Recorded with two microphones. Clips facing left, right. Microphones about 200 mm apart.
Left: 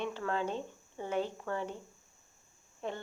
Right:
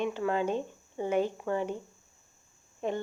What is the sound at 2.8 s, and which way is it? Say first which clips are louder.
Speech: right 7 dB; 20° right (ahead or behind).